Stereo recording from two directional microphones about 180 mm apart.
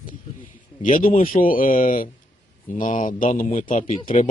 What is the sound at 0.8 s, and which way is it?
Speech, 45° left (ahead or behind).